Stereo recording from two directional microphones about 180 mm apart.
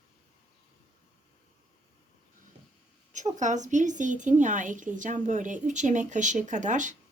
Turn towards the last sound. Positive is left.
turn(degrees=-45)  # may be behind; listen again after turning